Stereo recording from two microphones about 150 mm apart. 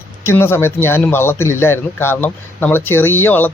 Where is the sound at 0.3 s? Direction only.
15° left (ahead or behind).